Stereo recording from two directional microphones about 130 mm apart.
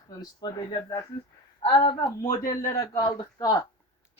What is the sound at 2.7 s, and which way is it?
Speech, 25° left (ahead or behind).